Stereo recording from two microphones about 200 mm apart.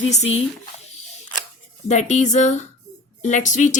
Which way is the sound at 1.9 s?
35° left (ahead or behind).